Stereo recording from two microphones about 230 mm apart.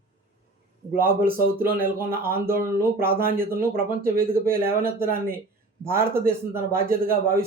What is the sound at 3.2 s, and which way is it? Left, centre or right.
Speech, right.